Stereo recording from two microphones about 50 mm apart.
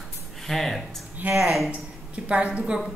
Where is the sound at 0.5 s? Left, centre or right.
Centre.